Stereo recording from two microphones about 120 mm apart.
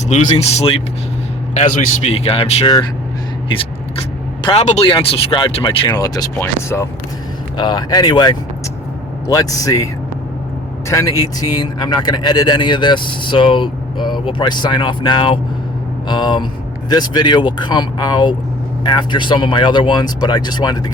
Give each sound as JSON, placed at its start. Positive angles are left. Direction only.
{"t": 0.1, "sound": "speech", "side_deg": 70}
{"t": 2.0, "sound": "speech", "side_deg": 55}
{"t": 4.5, "sound": "speech", "side_deg": 65}
{"t": 4.9, "sound": "speech", "side_deg": 45}
{"t": 5.9, "sound": "a man's voice", "side_deg": 30}
{"t": 7.5, "sound": "a man's voice", "side_deg": 35}